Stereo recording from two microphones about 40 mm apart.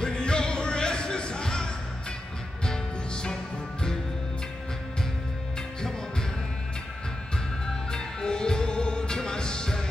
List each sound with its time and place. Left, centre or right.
0.0 s music: left
7.6 s music: centre